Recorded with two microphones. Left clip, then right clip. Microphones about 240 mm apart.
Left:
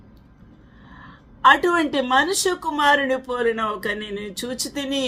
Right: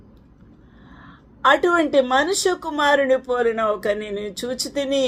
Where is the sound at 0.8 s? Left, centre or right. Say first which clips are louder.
Left 2 dB; left.